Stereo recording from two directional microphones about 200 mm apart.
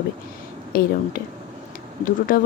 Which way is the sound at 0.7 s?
50° left (ahead or behind).